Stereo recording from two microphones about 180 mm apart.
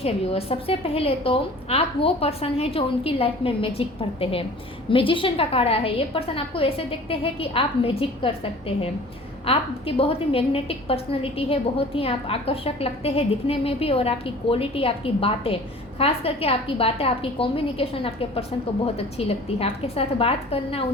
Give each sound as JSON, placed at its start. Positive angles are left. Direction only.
{"t": 0.0, "sound": "a woman's voice", "side_deg": 35}